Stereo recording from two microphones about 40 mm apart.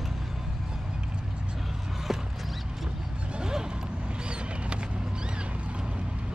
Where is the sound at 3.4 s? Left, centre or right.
Centre.